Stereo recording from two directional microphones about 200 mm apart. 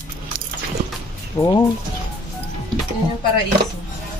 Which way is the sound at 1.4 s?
15° left (ahead or behind).